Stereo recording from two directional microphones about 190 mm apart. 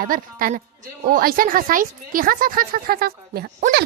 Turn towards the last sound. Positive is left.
turn(degrees=-55)  # may be behind; listen again after turning